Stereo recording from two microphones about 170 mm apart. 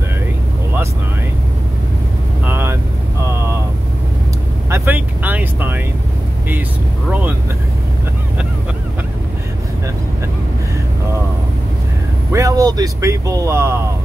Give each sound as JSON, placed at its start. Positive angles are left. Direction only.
{"t": 2.4, "sound": "vehicle", "side_deg": -15}
{"t": 4.6, "sound": "vehicle", "side_deg": -15}
{"t": 12.3, "sound": "a sound", "side_deg": -20}